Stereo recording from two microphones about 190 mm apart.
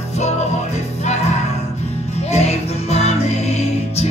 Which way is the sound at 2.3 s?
35° left (ahead or behind).